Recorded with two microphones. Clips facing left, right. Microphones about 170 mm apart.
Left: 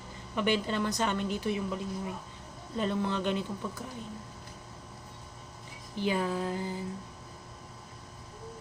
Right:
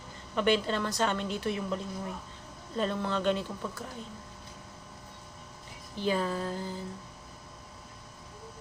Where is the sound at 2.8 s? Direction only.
15° left (ahead or behind).